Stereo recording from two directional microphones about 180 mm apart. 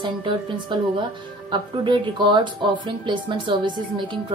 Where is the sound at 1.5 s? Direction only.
25° right (ahead or behind).